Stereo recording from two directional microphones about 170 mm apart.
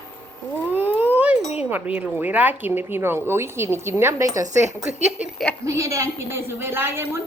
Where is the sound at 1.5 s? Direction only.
10° right (ahead or behind).